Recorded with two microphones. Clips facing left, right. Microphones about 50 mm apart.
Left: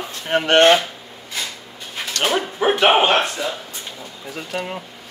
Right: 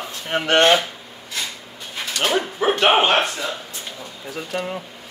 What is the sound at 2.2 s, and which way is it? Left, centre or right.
Speech, centre.